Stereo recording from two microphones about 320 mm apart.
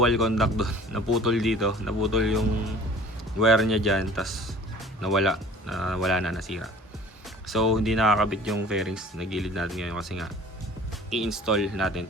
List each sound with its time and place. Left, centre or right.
0.0 s speech: centre